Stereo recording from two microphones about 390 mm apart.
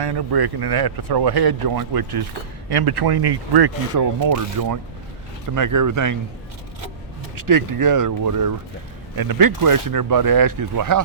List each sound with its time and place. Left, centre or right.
0.0 s speech: right
3.9 s speech: right
7.3 s speech: right